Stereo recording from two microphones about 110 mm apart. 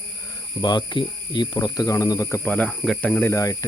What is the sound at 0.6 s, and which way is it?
Speech, 40° left (ahead or behind).